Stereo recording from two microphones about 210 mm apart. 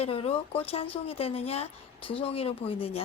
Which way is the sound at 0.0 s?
25° left (ahead or behind).